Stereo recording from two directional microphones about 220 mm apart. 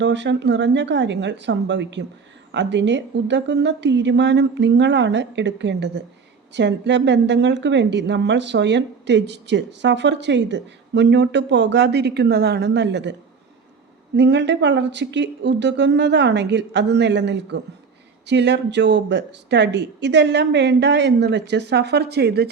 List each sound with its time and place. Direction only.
0.0 s a woman's voice: 55° right (ahead or behind)
14.2 s a woman's voice: 50° right (ahead or behind)